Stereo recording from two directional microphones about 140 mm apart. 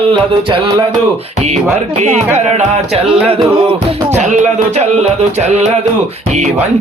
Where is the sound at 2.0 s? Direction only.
55° right (ahead or behind).